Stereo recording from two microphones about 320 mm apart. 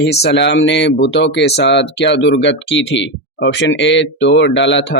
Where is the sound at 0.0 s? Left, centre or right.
Left.